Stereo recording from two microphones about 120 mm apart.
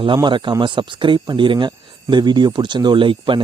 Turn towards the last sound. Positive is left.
turn(degrees=-45)  # may be behind; listen again after turning